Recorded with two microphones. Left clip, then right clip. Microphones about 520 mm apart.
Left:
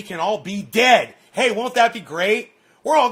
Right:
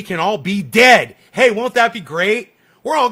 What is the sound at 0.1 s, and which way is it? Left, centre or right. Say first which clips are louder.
A man's voice: right 4 dB; right.